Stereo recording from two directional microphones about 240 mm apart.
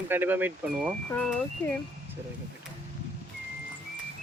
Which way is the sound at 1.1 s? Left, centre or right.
Centre.